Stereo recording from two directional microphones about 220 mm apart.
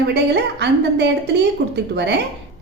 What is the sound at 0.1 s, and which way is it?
A woman's voice, 50° right (ahead or behind).